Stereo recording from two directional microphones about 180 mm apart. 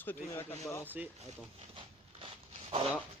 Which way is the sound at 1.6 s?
30° right (ahead or behind).